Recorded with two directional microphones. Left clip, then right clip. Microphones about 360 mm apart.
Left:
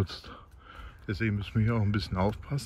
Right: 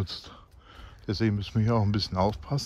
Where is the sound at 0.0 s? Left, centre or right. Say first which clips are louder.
Even; centre.